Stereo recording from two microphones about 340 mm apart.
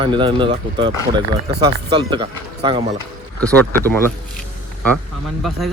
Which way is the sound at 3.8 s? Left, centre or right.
Centre.